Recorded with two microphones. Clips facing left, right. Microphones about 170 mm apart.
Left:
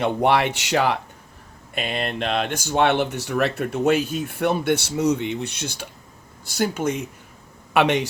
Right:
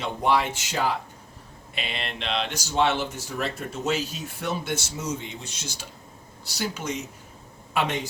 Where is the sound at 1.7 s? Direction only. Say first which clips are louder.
Left 8 dB; 45° left (ahead or behind).